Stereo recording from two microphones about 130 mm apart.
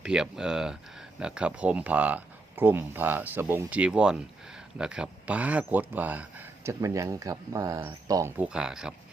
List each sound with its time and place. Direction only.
0.0 s speech: 5° right (ahead or behind)
6.7 s speech: 25° right (ahead or behind)
8.4 s speech: 5° right (ahead or behind)